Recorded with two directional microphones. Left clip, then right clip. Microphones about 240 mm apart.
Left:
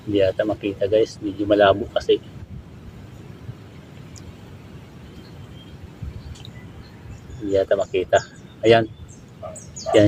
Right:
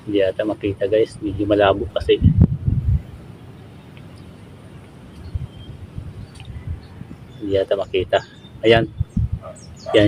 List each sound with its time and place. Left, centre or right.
0.1 s speech: centre
7.5 s speech: centre
9.9 s a sound: left